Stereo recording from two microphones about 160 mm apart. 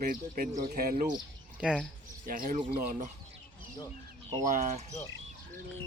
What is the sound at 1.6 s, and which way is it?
Speech, 5° right (ahead or behind).